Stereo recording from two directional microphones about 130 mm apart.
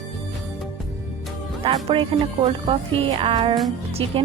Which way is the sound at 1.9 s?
40° right (ahead or behind).